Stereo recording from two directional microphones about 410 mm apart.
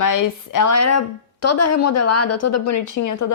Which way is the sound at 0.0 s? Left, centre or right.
Left.